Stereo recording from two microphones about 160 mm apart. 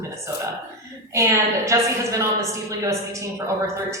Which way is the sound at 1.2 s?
20° right (ahead or behind).